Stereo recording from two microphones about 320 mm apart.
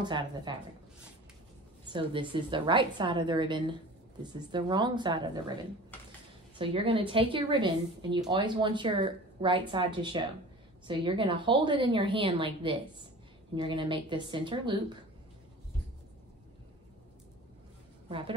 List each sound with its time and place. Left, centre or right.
0.0 s a woman's voice: centre
1.9 s a woman's voice: centre
6.6 s a woman's voice: centre